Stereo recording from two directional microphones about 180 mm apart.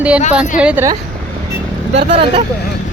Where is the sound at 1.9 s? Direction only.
30° right (ahead or behind).